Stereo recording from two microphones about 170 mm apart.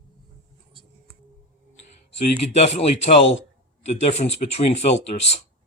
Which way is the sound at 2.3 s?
40° left (ahead or behind).